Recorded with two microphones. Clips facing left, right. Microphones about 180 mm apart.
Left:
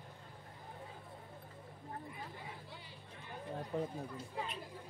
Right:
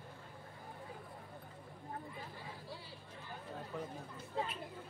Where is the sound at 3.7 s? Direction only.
30° left (ahead or behind).